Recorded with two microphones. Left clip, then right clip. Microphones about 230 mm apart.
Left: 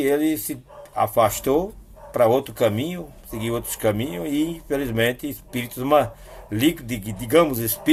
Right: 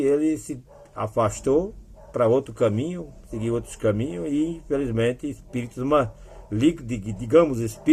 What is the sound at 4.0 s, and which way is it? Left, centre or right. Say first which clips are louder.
Speech: left 1 dB; left.